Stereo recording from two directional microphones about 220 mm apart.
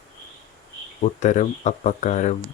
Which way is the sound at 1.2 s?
35° left (ahead or behind).